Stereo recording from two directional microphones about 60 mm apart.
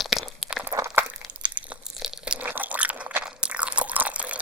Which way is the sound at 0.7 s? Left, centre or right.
Right.